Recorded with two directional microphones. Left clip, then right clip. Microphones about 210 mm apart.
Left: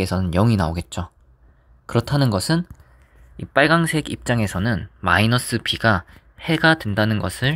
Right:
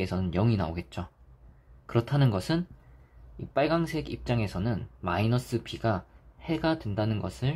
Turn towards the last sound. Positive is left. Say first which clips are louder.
# left 11 dB
turn(degrees=35)  # may be behind; listen again after turning